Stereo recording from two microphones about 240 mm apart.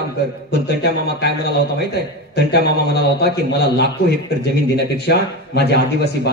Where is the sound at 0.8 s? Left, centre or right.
Left.